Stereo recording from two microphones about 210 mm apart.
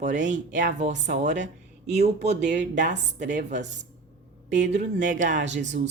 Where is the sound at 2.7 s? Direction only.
35° right (ahead or behind).